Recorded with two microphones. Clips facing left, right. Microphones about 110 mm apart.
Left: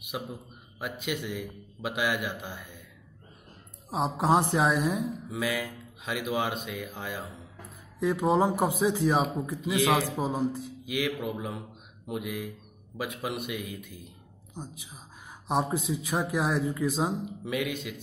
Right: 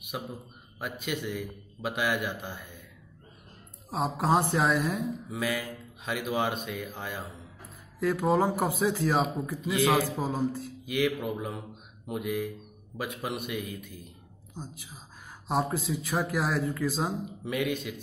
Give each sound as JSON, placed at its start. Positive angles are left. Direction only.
{"t": 0.1, "sound": "speech", "side_deg": 10}
{"t": 3.9, "sound": "speech", "side_deg": 15}